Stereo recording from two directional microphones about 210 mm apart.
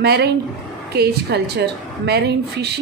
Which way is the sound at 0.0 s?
50° right (ahead or behind).